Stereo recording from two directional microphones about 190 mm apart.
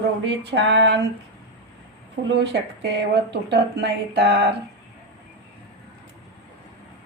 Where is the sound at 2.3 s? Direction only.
65° right (ahead or behind).